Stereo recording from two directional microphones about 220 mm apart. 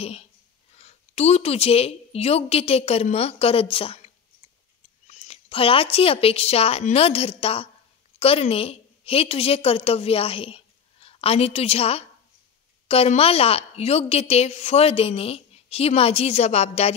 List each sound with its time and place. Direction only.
0.0 s a woman's voice: 30° left (ahead or behind)